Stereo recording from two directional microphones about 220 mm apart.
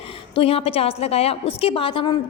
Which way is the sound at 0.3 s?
25° left (ahead or behind).